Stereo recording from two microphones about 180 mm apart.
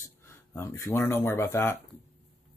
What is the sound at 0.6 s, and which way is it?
Speech, 15° left (ahead or behind).